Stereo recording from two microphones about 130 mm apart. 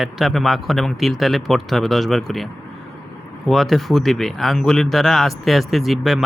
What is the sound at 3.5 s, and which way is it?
Speech, centre (ahead or behind).